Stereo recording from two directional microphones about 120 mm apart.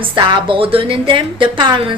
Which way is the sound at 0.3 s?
45° right (ahead or behind).